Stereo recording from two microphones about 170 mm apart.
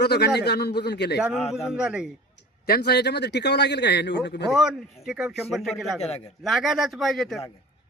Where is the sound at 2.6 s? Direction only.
70° left (ahead or behind); by 4.4 s 90° left.